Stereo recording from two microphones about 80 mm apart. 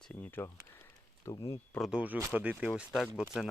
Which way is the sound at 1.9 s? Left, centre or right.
Centre.